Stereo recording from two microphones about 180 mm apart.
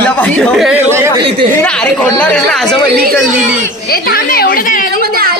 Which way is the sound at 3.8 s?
55° left (ahead or behind).